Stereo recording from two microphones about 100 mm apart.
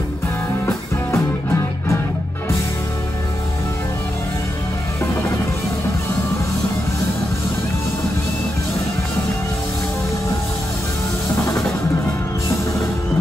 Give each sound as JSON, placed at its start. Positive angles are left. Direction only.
{"t": 1.1, "sound": "music", "side_deg": 25}